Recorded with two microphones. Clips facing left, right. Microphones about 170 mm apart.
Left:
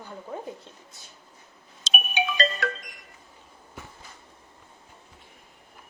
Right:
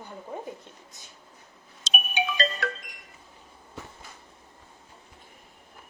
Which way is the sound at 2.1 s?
80° left.